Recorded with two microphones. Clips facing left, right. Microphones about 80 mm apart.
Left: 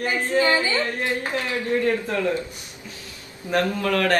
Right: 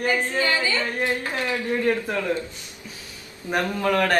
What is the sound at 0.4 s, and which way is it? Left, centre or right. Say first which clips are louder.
Speech: left 3 dB; left.